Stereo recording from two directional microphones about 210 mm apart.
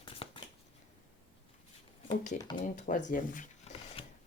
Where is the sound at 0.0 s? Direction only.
25° left (ahead or behind).